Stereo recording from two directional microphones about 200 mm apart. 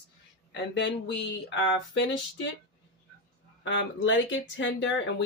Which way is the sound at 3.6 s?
65° left (ahead or behind).